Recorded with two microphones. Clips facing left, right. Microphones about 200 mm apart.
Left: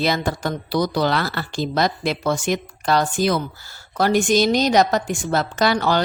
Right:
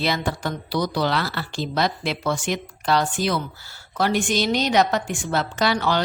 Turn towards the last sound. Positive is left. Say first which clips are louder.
# left 3 dB
turn(degrees=45)  # may be behind; listen again after turning